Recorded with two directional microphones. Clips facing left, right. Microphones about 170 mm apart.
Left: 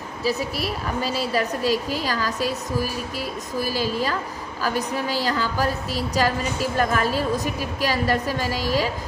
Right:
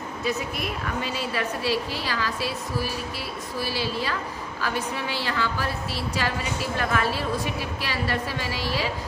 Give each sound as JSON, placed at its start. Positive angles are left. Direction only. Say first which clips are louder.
{"t": 0.2, "sound": "a woman's voice", "louder": "left 4 dB", "side_deg": 35}